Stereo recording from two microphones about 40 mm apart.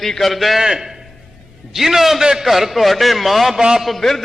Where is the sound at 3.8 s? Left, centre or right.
Centre.